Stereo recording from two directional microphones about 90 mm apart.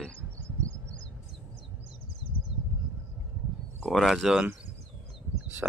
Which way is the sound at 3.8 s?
Centre (ahead or behind).